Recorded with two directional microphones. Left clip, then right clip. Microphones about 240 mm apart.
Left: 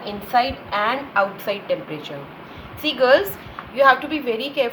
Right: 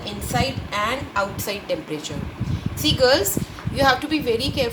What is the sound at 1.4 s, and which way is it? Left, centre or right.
Speech, right.